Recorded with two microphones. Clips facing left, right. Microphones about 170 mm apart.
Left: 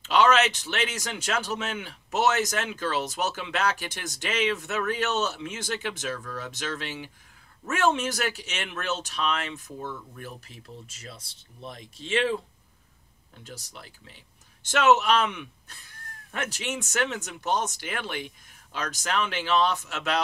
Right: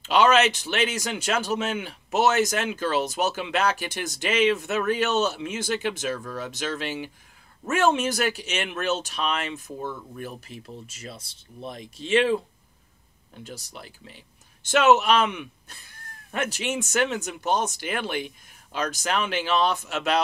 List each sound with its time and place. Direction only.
0.1 s speech: 10° right (ahead or behind)
6.1 s speech: 30° right (ahead or behind)
7.8 s speech: 15° right (ahead or behind)
9.7 s speech: 30° right (ahead or behind)
11.6 s speech: 15° right (ahead or behind)
14.7 s speech: 10° right (ahead or behind)